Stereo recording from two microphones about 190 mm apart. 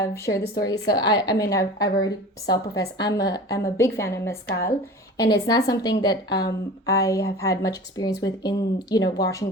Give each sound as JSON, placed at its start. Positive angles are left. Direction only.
{"t": 0.0, "sound": "a woman's voice", "side_deg": 15}